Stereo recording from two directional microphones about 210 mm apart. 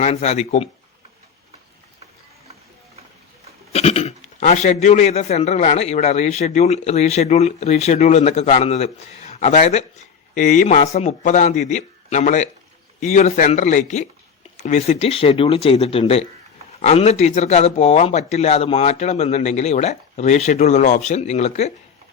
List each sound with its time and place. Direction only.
0.0 s a man's voice: 30° left (ahead or behind)
3.7 s a man's voice: 30° left (ahead or behind)